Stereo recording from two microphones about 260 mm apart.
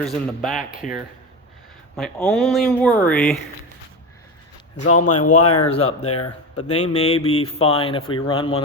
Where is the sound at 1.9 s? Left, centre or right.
Centre.